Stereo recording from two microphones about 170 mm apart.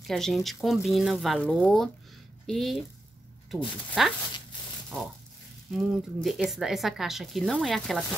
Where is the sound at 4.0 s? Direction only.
Centre (ahead or behind).